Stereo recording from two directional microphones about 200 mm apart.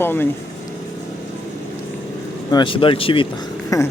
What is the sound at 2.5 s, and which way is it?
Speech, 25° left (ahead or behind).